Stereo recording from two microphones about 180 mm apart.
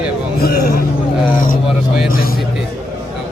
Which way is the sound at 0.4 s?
55° left (ahead or behind).